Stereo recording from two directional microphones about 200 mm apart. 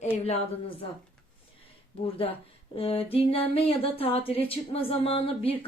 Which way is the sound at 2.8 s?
30° left (ahead or behind).